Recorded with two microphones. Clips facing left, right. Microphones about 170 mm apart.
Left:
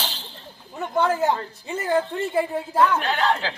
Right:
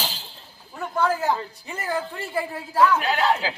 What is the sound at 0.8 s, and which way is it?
Speech, 25° left (ahead or behind).